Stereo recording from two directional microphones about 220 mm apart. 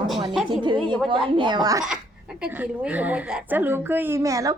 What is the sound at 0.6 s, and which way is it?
A woman's voice, 20° right (ahead or behind).